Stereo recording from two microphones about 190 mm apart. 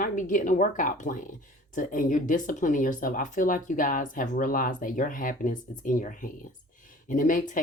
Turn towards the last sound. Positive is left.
turn(degrees=45)  # may be behind; listen again after turning